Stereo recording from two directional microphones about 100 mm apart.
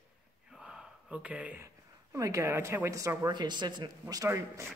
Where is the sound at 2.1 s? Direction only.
30° right (ahead or behind).